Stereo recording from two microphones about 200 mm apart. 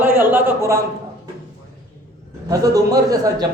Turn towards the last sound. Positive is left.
turn(degrees=-20)  # may be behind; listen again after turning